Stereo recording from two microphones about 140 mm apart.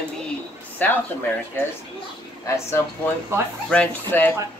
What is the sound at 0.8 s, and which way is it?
Speech, 10° left (ahead or behind).